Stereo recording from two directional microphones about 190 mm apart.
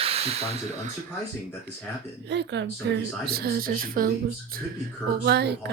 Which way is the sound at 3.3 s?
55° right (ahead or behind).